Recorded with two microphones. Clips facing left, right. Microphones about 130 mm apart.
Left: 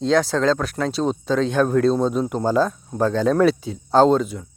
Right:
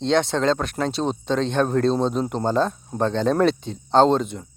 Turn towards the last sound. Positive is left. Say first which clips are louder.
# left 1 dB
turn(degrees=0)  # may be behind; listen again after turning